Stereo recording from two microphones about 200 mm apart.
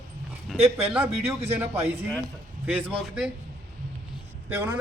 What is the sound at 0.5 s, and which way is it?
Speech, 30° right (ahead or behind).